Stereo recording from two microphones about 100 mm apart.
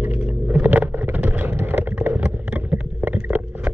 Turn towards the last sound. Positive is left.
turn(degrees=-15)  # may be behind; listen again after turning